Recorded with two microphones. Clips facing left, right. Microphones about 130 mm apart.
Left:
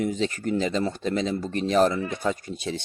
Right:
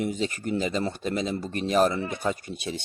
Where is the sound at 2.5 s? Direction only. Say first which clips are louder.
Left 2 dB; 15° right (ahead or behind).